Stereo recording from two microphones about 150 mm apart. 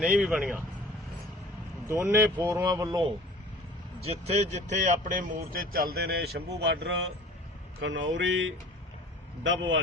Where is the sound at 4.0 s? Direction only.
45° right (ahead or behind); by 6.6 s 90° right.